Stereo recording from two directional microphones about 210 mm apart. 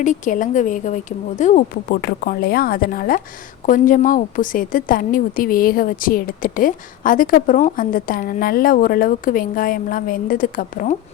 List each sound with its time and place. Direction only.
0.0 s a woman's voice: 35° left (ahead or behind)